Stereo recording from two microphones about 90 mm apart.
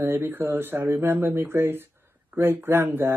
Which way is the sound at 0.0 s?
25° right (ahead or behind).